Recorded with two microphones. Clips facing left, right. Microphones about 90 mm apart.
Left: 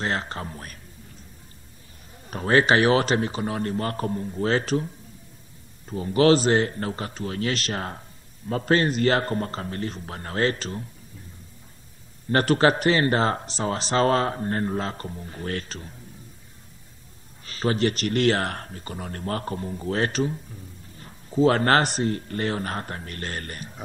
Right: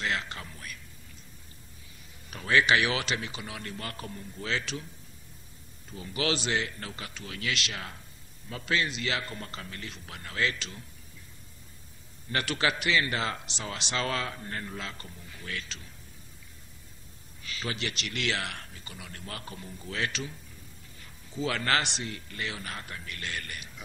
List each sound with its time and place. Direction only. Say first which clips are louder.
0.0 s speech: left 5 dB; 35° left (ahead or behind)
2.2 s speech: left 5 dB; 40° left (ahead or behind)
5.9 s speech: left 13 dB; 40° left (ahead or behind)
12.3 s speech: left 10 dB; 40° left (ahead or behind)
17.4 s speech: left 12 dB; 40° left (ahead or behind)